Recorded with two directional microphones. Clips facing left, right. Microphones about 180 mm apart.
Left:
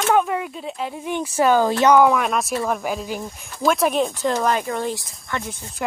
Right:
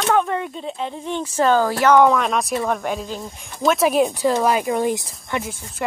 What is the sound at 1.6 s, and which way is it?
Speech, 20° left (ahead or behind).